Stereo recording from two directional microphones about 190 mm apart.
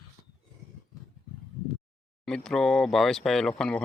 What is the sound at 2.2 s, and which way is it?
Speech, 5° left (ahead or behind).